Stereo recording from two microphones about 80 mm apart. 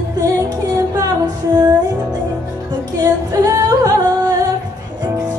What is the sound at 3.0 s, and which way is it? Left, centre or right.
Music, right.